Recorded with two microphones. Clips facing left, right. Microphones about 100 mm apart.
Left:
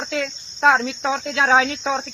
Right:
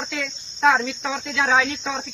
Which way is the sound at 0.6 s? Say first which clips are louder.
Left 2 dB; 50° left (ahead or behind).